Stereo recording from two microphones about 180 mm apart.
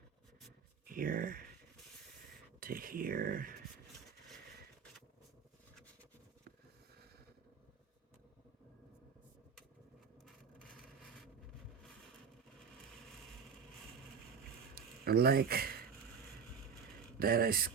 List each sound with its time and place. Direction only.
0.9 s speech: 50° right (ahead or behind)
2.6 s speech: 55° right (ahead or behind)
14.8 s a sound: 60° right (ahead or behind)
17.2 s speech: 55° right (ahead or behind)